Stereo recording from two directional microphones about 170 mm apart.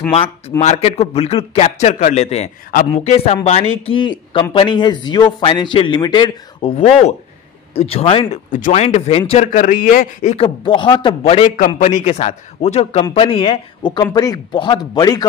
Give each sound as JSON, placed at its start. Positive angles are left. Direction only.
{"t": 0.6, "sound": "a man's voice", "side_deg": 40}
{"t": 7.7, "sound": "a man's voice", "side_deg": 35}
{"t": 8.5, "sound": "speech", "side_deg": 50}
{"t": 8.8, "sound": "a man's voice", "side_deg": 40}
{"t": 10.3, "sound": "a man's voice", "side_deg": 30}